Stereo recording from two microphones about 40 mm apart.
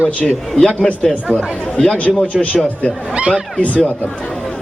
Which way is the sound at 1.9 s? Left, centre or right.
Left.